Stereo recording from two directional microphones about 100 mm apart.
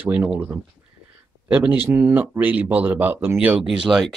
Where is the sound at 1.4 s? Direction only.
20° right (ahead or behind).